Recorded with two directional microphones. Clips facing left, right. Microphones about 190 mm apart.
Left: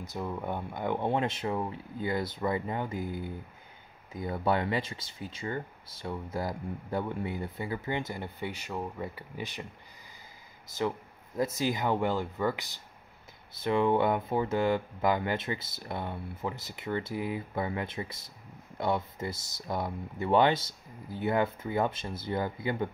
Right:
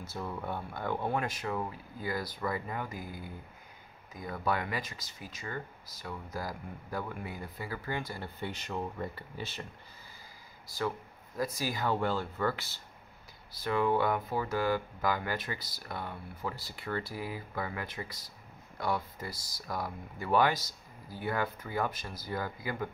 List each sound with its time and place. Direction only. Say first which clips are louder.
0.0 s speech: left 3 dB; 15° left (ahead or behind)
10.7 s speech: left 3 dB; 20° left (ahead or behind)